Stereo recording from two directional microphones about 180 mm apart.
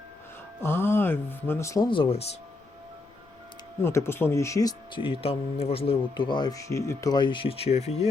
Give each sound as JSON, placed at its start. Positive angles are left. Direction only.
{"t": 0.6, "sound": "speech", "side_deg": 10}
{"t": 3.8, "sound": "speech", "side_deg": 15}